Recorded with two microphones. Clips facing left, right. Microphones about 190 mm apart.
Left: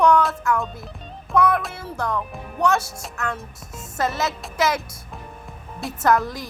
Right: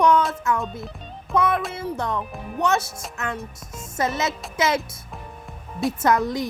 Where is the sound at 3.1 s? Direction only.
20° right (ahead or behind).